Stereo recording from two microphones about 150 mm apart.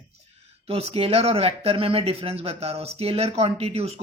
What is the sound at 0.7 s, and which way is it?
Speech, 40° right (ahead or behind).